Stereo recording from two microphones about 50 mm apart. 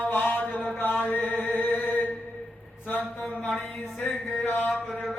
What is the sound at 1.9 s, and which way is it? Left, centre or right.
Mantra, left.